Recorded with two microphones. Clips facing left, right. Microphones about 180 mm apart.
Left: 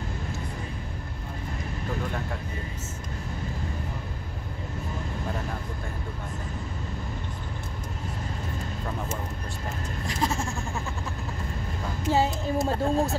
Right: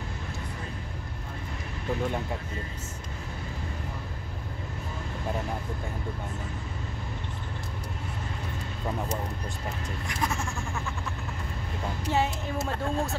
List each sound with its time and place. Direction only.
10.0 s goat: 30° left (ahead or behind)
12.1 s speech: 35° left (ahead or behind)